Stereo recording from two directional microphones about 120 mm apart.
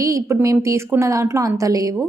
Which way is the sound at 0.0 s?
25° right (ahead or behind).